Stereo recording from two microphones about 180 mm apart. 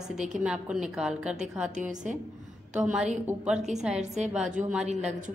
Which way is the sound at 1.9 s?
40° right (ahead or behind).